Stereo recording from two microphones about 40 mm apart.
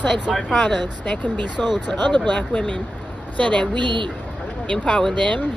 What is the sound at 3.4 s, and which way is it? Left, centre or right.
Speech, left.